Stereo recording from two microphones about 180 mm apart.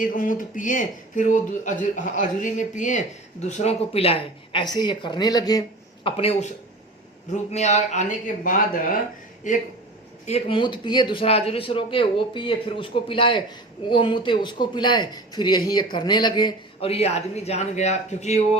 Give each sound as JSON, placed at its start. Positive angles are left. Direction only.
{"t": 0.0, "sound": "speech", "side_deg": 50}
{"t": 7.5, "sound": "speech", "side_deg": 40}
{"t": 10.2, "sound": "speech", "side_deg": 35}